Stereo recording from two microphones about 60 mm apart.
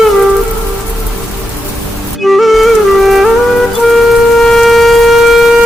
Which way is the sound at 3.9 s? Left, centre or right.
Centre.